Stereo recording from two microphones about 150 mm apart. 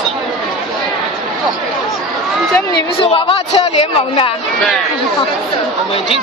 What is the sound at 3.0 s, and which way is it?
Speech, 40° left (ahead or behind).